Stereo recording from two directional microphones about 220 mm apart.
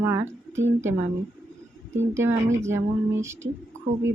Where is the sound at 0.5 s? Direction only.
60° right (ahead or behind).